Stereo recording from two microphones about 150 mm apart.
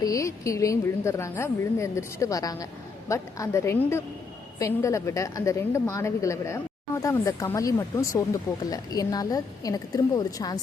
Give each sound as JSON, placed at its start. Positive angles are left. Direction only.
{"t": 0.0, "sound": "a woman's voice", "side_deg": 20}